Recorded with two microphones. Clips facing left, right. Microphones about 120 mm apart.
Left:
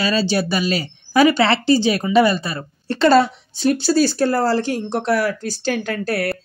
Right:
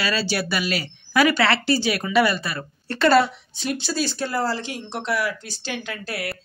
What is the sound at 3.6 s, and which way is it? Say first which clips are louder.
Speech: left 10 dB; 40° left (ahead or behind).